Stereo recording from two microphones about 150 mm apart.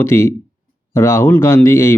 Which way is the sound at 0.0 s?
15° left (ahead or behind).